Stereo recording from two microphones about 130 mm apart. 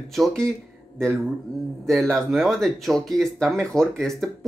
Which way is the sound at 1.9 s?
5° left (ahead or behind).